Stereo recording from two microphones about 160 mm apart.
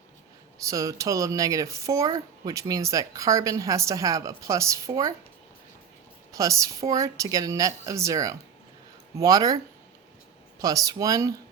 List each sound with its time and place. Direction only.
0.7 s speech: 20° right (ahead or behind)
6.3 s speech: 20° right (ahead or behind)
10.6 s speech: 20° right (ahead or behind)